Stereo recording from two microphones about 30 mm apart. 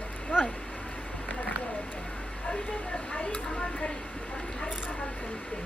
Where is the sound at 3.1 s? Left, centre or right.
Left.